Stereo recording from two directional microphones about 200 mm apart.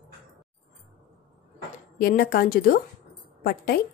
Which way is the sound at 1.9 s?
45° left (ahead or behind).